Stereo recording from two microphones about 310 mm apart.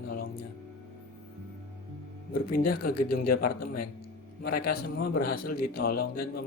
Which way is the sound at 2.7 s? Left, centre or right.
Left.